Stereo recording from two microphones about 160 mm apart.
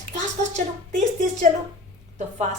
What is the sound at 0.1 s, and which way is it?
A woman's voice, 50° right (ahead or behind).